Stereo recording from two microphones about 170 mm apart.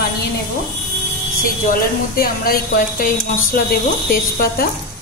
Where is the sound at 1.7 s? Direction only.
60° left (ahead or behind).